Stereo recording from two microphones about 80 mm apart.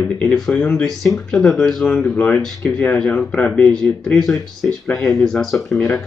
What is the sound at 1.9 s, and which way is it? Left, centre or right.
Speech, centre.